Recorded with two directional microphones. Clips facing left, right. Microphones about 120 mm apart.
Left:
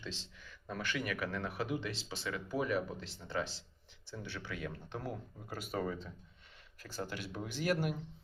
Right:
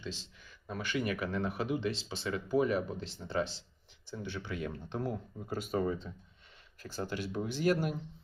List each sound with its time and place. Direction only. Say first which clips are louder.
0.7 s speech: right 1 dB; 10° right (ahead or behind)
0.9 s speech: right 7 dB; 25° right (ahead or behind)